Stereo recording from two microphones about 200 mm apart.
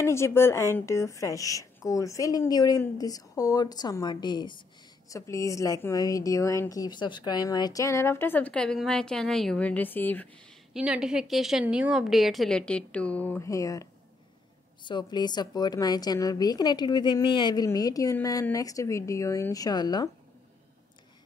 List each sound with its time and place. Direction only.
0.0 s a woman's voice: 15° left (ahead or behind)
10.7 s a woman's voice: 5° right (ahead or behind); by 20.1 s 20° left (ahead or behind)